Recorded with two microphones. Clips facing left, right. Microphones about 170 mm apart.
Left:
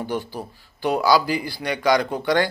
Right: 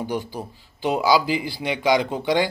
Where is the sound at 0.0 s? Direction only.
15° right (ahead or behind).